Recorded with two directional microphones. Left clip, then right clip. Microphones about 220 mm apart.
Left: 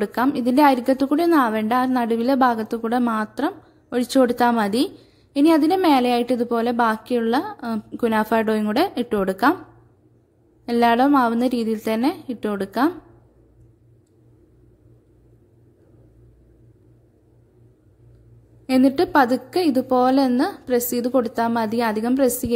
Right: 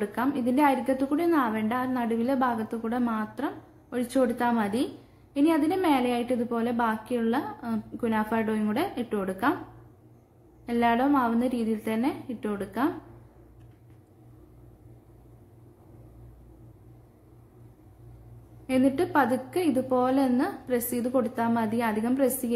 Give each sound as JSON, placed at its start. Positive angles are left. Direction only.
{"t": 0.0, "sound": "a woman's voice", "side_deg": 45}
{"t": 10.6, "sound": "a woman's voice", "side_deg": 45}
{"t": 18.7, "sound": "a woman's voice", "side_deg": 40}